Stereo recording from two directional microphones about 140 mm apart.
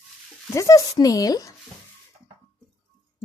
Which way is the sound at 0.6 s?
25° left (ahead or behind).